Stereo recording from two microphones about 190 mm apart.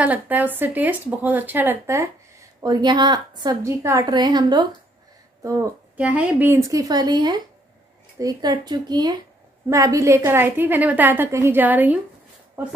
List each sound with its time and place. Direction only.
0.0 s a woman's voice: 10° right (ahead or behind)